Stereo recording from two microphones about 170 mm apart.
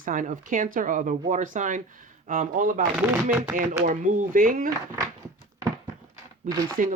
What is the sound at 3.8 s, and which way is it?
Speech, 50° right (ahead or behind).